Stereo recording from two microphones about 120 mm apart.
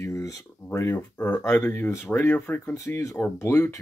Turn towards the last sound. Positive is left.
turn(degrees=20)  # may be behind; listen again after turning